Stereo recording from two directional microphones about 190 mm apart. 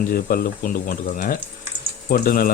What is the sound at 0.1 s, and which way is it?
Speech, 50° left (ahead or behind).